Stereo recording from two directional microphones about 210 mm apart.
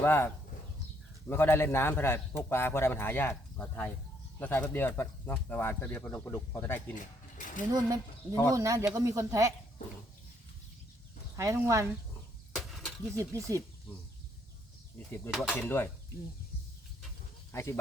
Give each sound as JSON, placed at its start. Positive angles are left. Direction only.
{"t": 0.0, "sound": "a man's voice", "side_deg": 10}
{"t": 1.3, "sound": "a man's voice", "side_deg": 10}
{"t": 6.9, "sound": "speech", "side_deg": 40}
{"t": 7.7, "sound": "speech", "side_deg": -15}
{"t": 11.3, "sound": "speech", "side_deg": -15}
{"t": 12.5, "sound": "a sound", "side_deg": 0}
{"t": 13.1, "sound": "speech", "side_deg": -15}
{"t": 15.3, "sound": "a man's voice", "side_deg": 0}
{"t": 17.5, "sound": "speech", "side_deg": 10}